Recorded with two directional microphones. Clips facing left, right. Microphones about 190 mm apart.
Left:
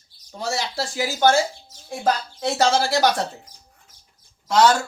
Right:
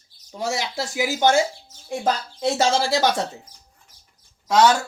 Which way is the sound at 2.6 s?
25° right (ahead or behind).